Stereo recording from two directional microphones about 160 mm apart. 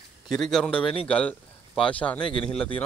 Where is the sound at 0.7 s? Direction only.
35° left (ahead or behind).